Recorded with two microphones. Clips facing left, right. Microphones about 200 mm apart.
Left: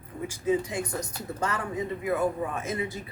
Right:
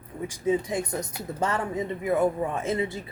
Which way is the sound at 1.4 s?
25° right (ahead or behind).